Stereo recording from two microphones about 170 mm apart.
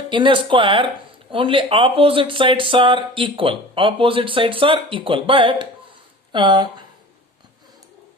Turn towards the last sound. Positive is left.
turn(degrees=-25)  # may be behind; listen again after turning